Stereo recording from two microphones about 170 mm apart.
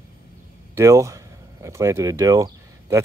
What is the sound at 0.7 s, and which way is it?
Speech, 20° right (ahead or behind).